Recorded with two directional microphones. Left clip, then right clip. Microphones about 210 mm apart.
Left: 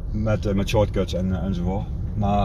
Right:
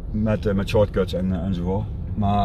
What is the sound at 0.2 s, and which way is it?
Speech, centre (ahead or behind).